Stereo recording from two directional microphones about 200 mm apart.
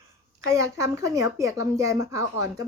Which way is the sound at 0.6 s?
15° right (ahead or behind).